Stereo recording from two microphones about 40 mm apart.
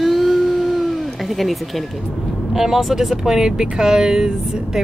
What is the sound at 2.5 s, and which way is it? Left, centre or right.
Speech, centre.